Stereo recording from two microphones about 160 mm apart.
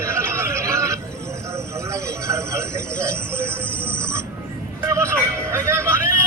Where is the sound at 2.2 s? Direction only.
20° right (ahead or behind).